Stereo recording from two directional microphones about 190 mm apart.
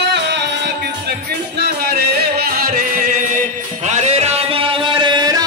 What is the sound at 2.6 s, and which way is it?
Music, 45° right (ahead or behind).